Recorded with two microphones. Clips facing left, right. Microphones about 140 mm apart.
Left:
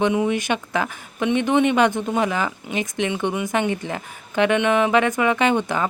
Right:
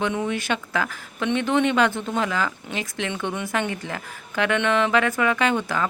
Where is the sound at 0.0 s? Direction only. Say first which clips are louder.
Left 5 dB; 15° left (ahead or behind).